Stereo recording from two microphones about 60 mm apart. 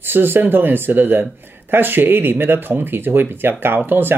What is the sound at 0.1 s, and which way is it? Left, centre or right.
Speech, right.